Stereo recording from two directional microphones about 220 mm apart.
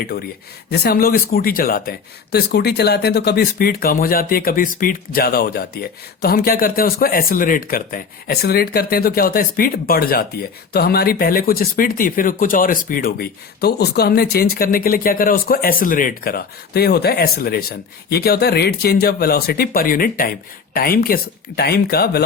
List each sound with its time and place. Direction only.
0.7 s speech: 45° left (ahead or behind)